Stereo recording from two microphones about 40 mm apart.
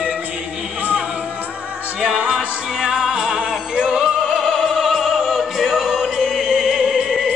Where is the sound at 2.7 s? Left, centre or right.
Centre.